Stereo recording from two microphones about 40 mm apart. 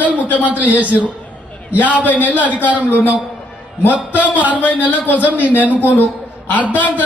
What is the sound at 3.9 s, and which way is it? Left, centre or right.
Speech, right.